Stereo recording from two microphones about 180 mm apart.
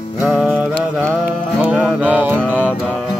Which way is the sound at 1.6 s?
5° right (ahead or behind).